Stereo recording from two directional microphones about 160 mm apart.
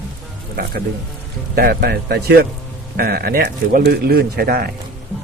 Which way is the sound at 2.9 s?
75° right (ahead or behind).